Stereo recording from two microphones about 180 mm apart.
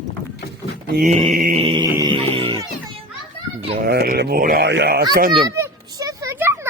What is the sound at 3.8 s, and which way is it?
Speech, 65° right (ahead or behind).